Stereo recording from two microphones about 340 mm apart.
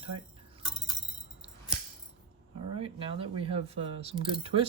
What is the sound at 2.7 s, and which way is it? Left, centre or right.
Speech, centre.